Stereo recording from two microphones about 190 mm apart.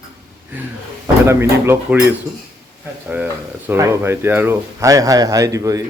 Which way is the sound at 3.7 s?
10° right (ahead or behind).